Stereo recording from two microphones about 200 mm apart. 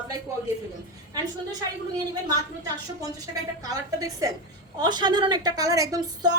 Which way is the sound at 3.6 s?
15° right (ahead or behind).